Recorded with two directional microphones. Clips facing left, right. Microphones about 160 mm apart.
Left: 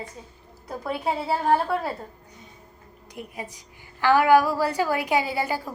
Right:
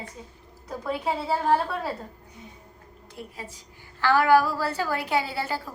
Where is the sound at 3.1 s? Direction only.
15° left (ahead or behind).